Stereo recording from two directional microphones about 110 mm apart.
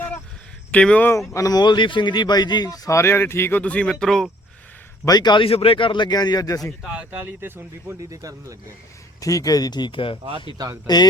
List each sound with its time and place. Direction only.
0.7 s speech: 10° left (ahead or behind)
1.3 s speech: 30° left (ahead or behind)
3.6 s speech: 10° left (ahead or behind)
5.0 s speech: 40° left (ahead or behind)
6.8 s speech: 10° right (ahead or behind)
8.1 s speech: 30° right (ahead or behind)
9.2 s speech: 30° left (ahead or behind); by 10.2 s 50° left (ahead or behind)
10.9 s speech: 40° left (ahead or behind)